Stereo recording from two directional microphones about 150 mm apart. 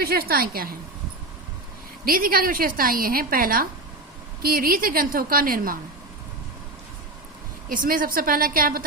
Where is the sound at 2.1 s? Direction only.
75° right (ahead or behind).